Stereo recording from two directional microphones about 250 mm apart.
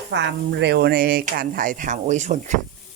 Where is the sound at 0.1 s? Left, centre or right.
Right.